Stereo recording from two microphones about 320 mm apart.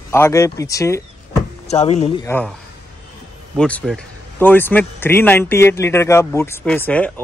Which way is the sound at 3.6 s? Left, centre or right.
Centre.